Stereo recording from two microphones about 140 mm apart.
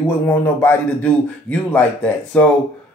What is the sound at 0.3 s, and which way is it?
Speech, 15° left (ahead or behind).